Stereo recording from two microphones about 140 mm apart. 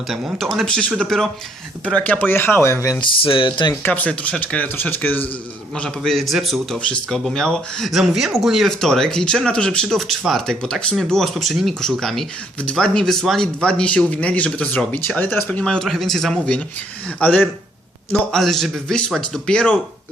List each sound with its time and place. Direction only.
0.1 s a man's voice: centre (ahead or behind); by 3.0 s 20° left (ahead or behind)
3.0 s speech: 40° left (ahead or behind)
3.8 s a man's voice: 10° left (ahead or behind)